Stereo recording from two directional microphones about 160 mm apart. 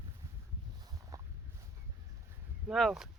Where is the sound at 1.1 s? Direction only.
20° right (ahead or behind).